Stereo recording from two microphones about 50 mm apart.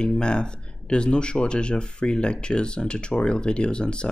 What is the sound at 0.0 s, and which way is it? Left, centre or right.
Speech, centre.